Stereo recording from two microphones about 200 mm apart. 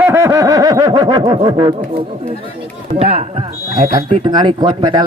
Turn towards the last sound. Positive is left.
turn(degrees=-20)  # may be behind; listen again after turning